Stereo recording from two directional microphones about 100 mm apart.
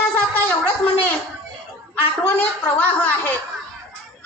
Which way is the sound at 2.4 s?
15° left (ahead or behind).